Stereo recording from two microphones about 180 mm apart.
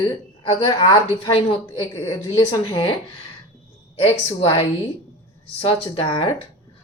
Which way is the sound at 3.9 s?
35° left (ahead or behind).